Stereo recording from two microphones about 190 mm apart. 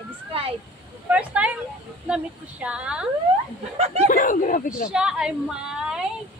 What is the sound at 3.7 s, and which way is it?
Speech, 35° right (ahead or behind).